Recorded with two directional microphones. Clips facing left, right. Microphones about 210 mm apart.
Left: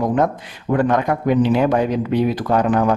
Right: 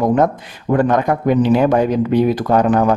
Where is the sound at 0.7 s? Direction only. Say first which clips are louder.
Right 2 dB; 40° right (ahead or behind).